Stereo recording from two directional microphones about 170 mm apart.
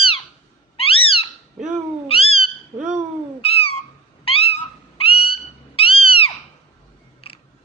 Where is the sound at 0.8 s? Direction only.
35° left (ahead or behind).